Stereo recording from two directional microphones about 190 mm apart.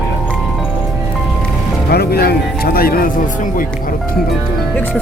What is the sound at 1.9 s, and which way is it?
Music, 55° left (ahead or behind).